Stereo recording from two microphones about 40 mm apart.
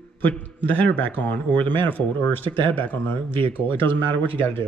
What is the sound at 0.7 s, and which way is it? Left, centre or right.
Speech, left.